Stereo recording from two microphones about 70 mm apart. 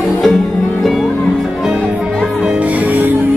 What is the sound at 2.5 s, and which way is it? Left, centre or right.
Music, right.